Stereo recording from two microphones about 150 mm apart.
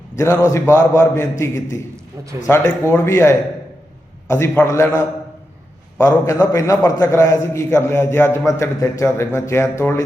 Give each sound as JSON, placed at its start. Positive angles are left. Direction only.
{"t": 0.5, "sound": "a man's voice", "side_deg": 10}
{"t": 6.0, "sound": "a man's voice", "side_deg": 20}